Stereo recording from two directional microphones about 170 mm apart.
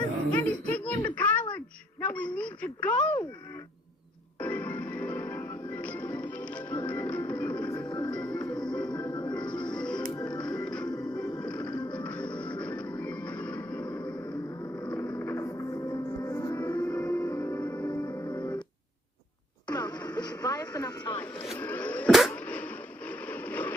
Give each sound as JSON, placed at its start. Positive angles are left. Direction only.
{"t": 0.3, "sound": "speech", "side_deg": 5}
{"t": 1.1, "sound": "a sound", "side_deg": 10}
{"t": 4.4, "sound": "music", "side_deg": 10}
{"t": 7.6, "sound": "music", "side_deg": 25}
{"t": 8.1, "sound": "music", "side_deg": 5}
{"t": 8.9, "sound": "music", "side_deg": 25}
{"t": 9.3, "sound": "music", "side_deg": 5}
{"t": 10.2, "sound": "music", "side_deg": 25}
{"t": 10.4, "sound": "music", "side_deg": 5}
{"t": 10.8, "sound": "music", "side_deg": 25}
{"t": 11.3, "sound": "music", "side_deg": 5}
{"t": 19.6, "sound": "music", "side_deg": 25}
{"t": 21.3, "sound": "vehicle", "side_deg": 35}
{"t": 21.6, "sound": "a sound", "side_deg": 10}